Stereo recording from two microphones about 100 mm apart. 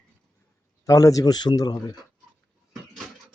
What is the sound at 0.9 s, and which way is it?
Speech, 35° left (ahead or behind).